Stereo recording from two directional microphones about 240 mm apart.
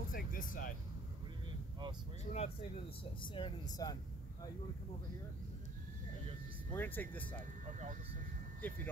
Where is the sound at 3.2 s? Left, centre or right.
Centre.